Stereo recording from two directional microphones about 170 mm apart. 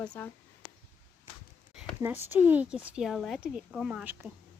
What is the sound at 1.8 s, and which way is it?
Speech, 10° right (ahead or behind).